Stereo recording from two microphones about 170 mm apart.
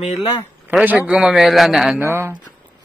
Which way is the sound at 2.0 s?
15° right (ahead or behind).